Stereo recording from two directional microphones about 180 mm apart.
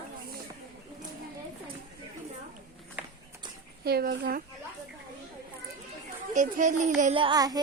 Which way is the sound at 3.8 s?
55° right (ahead or behind).